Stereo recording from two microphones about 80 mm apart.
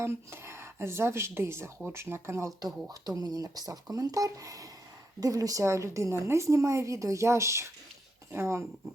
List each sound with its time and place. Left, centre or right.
0.0 s a woman's voice: right
3.2 s a woman's voice: right